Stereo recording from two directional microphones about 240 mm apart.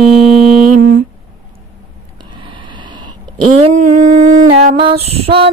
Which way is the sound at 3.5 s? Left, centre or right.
Right.